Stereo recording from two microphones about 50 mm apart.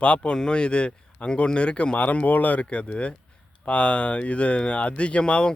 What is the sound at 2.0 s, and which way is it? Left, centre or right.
Speech, left.